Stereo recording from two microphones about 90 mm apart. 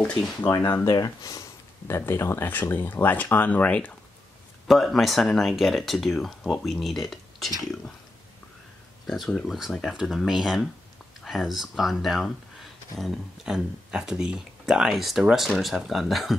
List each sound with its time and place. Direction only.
0.8 s speech: 45° left (ahead or behind); by 3.9 s 15° left (ahead or behind)
4.6 s speech: centre (ahead or behind)
9.0 s speech: centre (ahead or behind)